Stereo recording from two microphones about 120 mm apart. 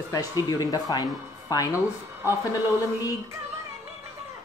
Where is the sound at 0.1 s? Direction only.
30° left (ahead or behind).